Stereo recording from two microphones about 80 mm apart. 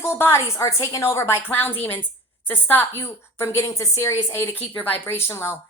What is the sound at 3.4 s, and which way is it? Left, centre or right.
Speech, left.